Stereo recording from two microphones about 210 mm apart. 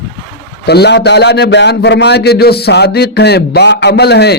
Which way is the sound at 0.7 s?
50° left (ahead or behind).